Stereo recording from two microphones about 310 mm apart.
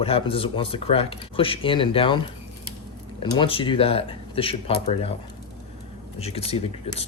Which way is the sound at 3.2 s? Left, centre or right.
Centre.